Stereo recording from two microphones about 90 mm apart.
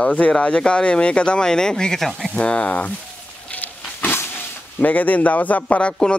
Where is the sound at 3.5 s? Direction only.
15° left (ahead or behind).